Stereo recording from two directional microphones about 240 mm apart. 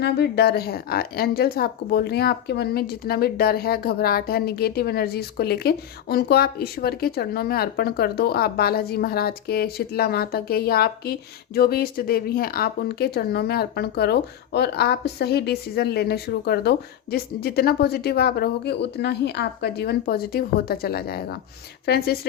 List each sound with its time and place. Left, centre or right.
0.0 s speech: left